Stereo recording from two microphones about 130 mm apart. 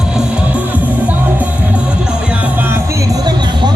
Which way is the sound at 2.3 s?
10° right (ahead or behind).